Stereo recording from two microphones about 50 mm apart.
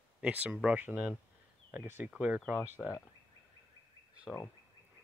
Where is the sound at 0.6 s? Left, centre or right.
Right.